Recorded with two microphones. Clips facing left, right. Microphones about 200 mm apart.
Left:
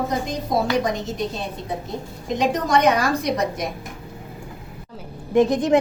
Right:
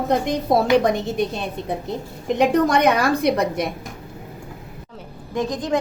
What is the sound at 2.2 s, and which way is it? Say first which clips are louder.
Speech: right 5 dB; 60° right (ahead or behind).